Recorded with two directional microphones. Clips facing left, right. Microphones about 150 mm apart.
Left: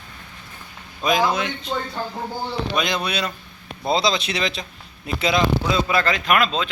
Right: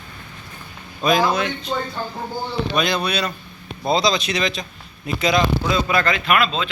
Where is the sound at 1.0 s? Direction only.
15° left (ahead or behind).